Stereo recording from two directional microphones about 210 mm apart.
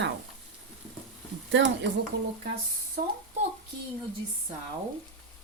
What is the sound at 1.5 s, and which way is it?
Speech, 60° right (ahead or behind).